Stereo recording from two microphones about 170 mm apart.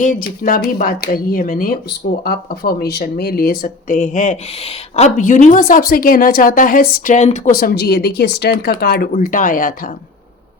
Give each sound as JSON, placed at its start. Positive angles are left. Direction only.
{"t": 0.0, "sound": "speech", "side_deg": 55}
{"t": 9.1, "sound": "speech", "side_deg": 50}